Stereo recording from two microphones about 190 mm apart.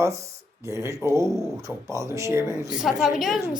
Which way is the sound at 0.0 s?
15° right (ahead or behind).